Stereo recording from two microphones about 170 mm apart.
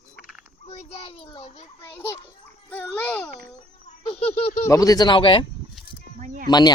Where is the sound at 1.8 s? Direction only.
15° left (ahead or behind).